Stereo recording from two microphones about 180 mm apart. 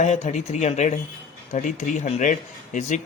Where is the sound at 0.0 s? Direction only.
40° left (ahead or behind).